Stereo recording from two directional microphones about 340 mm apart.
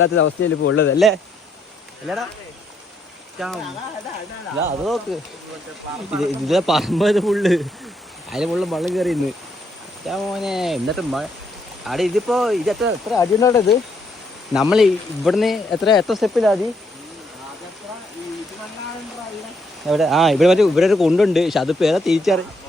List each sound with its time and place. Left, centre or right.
0.0 s speech: left
3.3 s speech: centre
4.6 s speech: centre
6.1 s speech: centre
14.5 s speech: centre
19.9 s speech: centre